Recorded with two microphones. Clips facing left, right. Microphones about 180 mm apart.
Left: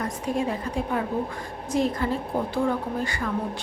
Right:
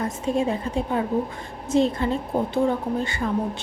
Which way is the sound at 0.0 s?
25° right (ahead or behind).